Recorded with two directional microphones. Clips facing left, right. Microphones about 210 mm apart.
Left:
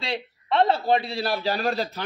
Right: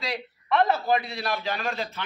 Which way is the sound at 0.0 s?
25° left (ahead or behind).